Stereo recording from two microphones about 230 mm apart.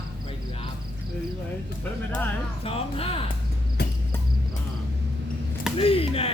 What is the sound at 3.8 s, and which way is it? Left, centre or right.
Cricket, left.